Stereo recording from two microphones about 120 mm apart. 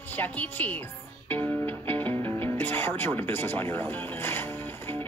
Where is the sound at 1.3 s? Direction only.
15° left (ahead or behind).